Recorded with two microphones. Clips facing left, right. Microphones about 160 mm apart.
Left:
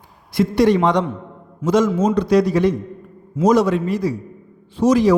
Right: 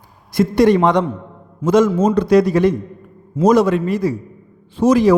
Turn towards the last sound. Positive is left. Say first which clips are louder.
# right 2 dB
turn(degrees=-55)  # may be behind; listen again after turning